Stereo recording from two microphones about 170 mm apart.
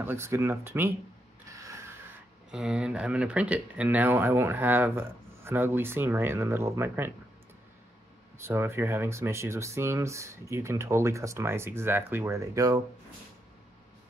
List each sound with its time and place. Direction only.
0.0 s speech: 15° right (ahead or behind)
1.5 s a sound: 15° right (ahead or behind)
2.5 s speech: 5° right (ahead or behind)
8.4 s speech: 15° right (ahead or behind)